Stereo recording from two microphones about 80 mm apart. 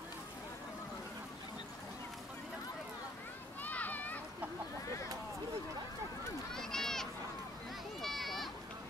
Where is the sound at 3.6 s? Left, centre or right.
Left.